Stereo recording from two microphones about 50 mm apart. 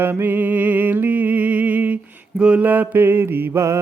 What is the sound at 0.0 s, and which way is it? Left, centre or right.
Music, right.